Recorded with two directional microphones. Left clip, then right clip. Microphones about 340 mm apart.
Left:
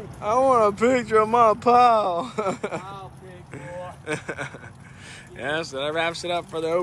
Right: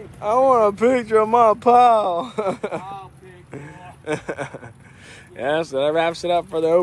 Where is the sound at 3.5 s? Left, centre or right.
Centre.